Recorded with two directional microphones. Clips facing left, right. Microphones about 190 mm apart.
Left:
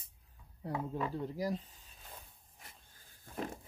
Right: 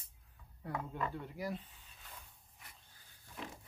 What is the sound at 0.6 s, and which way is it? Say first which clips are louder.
Speech: left 4 dB; 20° left (ahead or behind).